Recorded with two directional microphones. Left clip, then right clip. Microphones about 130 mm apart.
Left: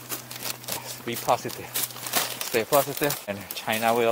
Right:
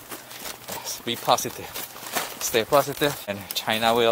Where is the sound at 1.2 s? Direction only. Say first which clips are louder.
Right 3 dB; 30° right (ahead or behind).